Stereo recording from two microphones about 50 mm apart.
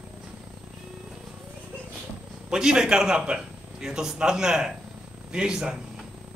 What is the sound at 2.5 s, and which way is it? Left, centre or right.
A man's voice, centre.